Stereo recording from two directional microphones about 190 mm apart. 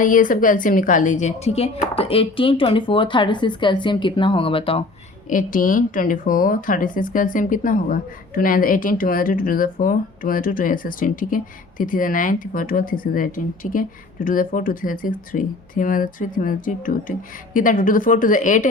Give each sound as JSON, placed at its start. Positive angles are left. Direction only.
{"t": 0.0, "sound": "speech", "side_deg": 45}
{"t": 5.3, "sound": "speech", "side_deg": 45}